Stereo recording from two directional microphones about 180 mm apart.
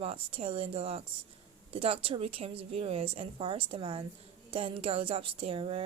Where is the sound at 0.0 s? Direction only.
35° right (ahead or behind).